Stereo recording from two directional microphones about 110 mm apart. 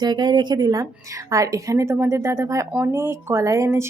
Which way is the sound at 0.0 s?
40° right (ahead or behind).